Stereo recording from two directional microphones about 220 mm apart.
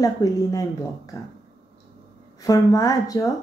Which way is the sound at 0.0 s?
15° left (ahead or behind).